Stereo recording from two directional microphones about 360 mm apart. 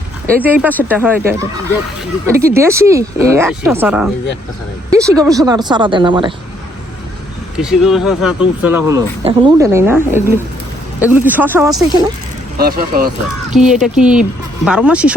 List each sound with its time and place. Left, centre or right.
0.4 s speech: centre
7.5 s speech: centre
12.5 s speech: right
13.5 s speech: centre